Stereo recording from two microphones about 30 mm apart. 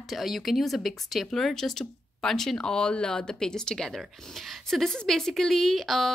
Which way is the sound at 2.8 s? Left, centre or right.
Left.